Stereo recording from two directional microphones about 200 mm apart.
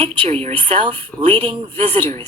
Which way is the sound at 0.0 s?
30° right (ahead or behind).